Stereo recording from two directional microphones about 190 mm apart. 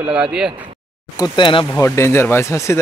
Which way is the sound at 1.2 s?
25° left (ahead or behind).